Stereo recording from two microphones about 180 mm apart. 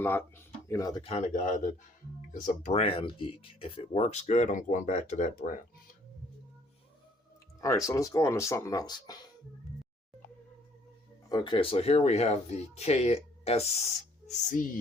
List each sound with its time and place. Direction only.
0.0 s speech: 10° left (ahead or behind)
1.0 s speech: 40° left (ahead or behind)
2.8 s speech: 30° left (ahead or behind); by 5.5 s 45° left (ahead or behind)
7.9 s speech: 15° left (ahead or behind)
11.3 s speech: 25° left (ahead or behind)
14.3 s speech: 45° left (ahead or behind)